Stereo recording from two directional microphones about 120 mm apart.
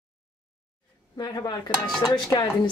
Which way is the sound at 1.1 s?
35° left (ahead or behind).